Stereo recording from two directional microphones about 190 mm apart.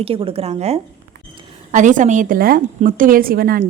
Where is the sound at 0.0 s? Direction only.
30° right (ahead or behind).